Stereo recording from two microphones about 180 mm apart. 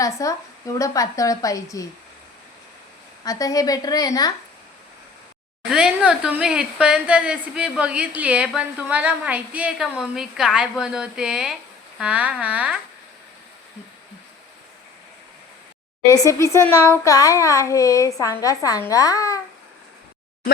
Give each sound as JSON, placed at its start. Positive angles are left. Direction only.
{"t": 0.0, "sound": "a woman's voice", "side_deg": 20}
{"t": 3.2, "sound": "a woman's voice", "side_deg": 20}
{"t": 5.7, "sound": "a woman's voice", "side_deg": -5}
{"t": 16.1, "sound": "a child's voice", "side_deg": 15}